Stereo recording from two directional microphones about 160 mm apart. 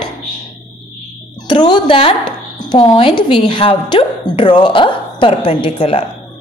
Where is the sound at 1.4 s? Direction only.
30° left (ahead or behind).